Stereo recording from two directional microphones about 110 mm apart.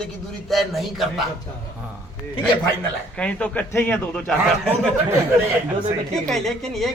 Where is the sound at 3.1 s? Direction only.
10° left (ahead or behind).